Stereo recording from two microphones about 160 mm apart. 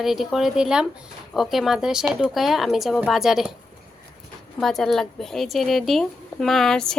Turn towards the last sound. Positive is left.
turn(degrees=5)  # may be behind; listen again after turning